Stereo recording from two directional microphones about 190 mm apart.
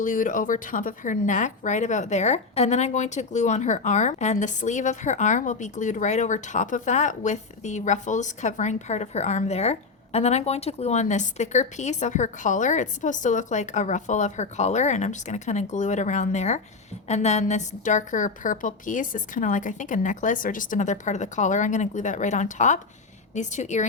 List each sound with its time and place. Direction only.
0.0 s speech: 45° left (ahead or behind)